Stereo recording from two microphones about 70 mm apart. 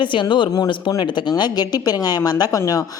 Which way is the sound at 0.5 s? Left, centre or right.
Left.